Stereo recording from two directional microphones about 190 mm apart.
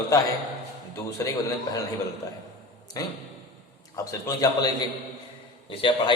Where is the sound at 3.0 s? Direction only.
20° left (ahead or behind).